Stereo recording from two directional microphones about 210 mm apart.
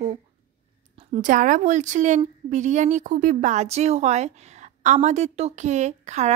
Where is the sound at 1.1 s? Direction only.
40° right (ahead or behind).